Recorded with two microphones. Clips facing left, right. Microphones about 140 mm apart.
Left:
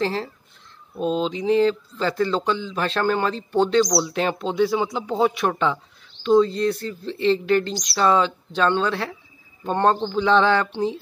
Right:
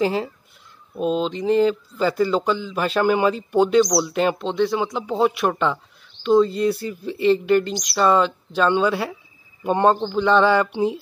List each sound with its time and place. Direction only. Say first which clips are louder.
0.0 s speech: right 3 dB; 5° right (ahead or behind)